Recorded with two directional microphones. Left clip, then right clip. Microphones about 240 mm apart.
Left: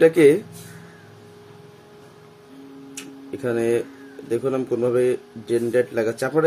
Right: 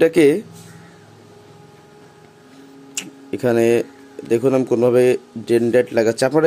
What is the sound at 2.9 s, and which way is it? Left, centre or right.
Tick-tock, right.